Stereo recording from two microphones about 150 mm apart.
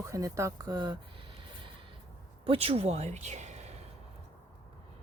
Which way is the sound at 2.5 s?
40° right (ahead or behind).